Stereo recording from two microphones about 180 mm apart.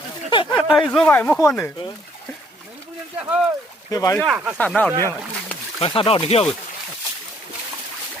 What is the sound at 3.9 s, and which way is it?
Speech, 20° left (ahead or behind).